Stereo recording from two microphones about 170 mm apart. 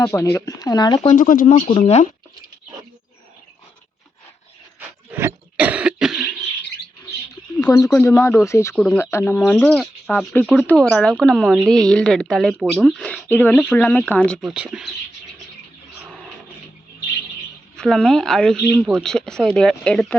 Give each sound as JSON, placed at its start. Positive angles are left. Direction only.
{"t": 0.0, "sound": "speech", "side_deg": 15}
{"t": 1.0, "sound": "speech", "side_deg": 50}
{"t": 1.7, "sound": "speech", "side_deg": 40}
{"t": 5.1, "sound": "cough", "side_deg": -10}
{"t": 7.6, "sound": "speech", "side_deg": 20}
{"t": 14.4, "sound": "speech", "side_deg": -5}
{"t": 17.7, "sound": "speech", "side_deg": 5}